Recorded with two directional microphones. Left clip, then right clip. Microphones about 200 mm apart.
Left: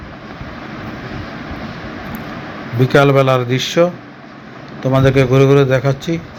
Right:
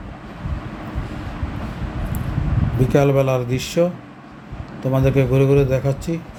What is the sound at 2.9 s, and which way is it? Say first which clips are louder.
A man's voice: left 6 dB; 5° right (ahead or behind).